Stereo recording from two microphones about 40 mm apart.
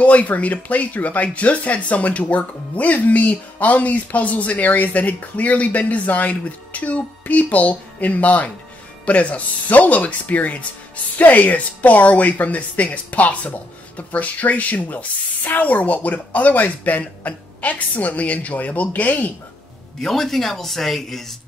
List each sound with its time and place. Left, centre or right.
0.0 s speech: left
20.0 s speech: centre